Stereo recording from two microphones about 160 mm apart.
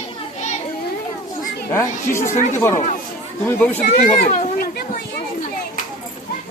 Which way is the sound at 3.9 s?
70° left (ahead or behind).